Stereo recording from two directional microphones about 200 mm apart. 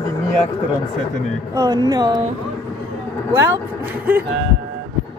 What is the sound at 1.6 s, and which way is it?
Speech, 20° right (ahead or behind).